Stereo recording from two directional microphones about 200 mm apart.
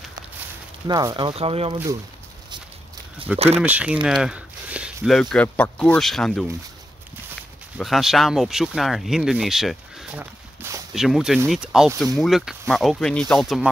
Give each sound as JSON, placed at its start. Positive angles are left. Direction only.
{"t": 0.8, "sound": "speech", "side_deg": -20}
{"t": 3.3, "sound": "speech", "side_deg": -30}
{"t": 3.6, "sound": "speech", "side_deg": -5}
{"t": 7.7, "sound": "speech", "side_deg": 0}